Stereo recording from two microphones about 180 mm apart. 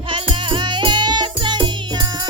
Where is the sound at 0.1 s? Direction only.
25° right (ahead or behind).